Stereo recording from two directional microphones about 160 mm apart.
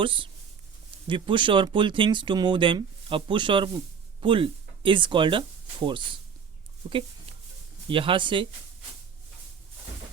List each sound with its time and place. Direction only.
0.0 s speech: 30° right (ahead or behind)